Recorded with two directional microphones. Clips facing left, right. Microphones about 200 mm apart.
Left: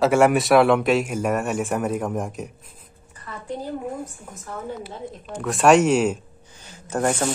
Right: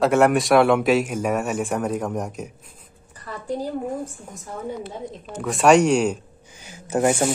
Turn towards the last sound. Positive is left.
turn(degrees=-10)  # may be behind; listen again after turning